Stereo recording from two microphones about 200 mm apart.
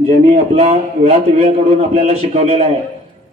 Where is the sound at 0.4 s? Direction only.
30° right (ahead or behind).